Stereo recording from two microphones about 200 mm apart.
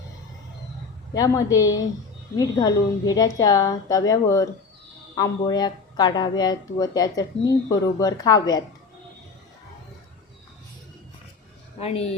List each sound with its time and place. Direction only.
1.1 s a woman's voice: 15° left (ahead or behind)
11.8 s speech: 30° left (ahead or behind)